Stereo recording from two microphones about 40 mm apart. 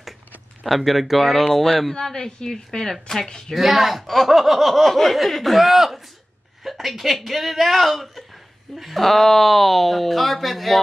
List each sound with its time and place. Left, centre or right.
0.7 s speech: centre
3.5 s speech: centre